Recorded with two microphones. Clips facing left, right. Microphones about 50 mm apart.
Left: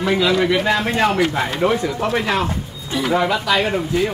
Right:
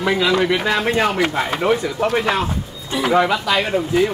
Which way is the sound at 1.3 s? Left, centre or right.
Centre.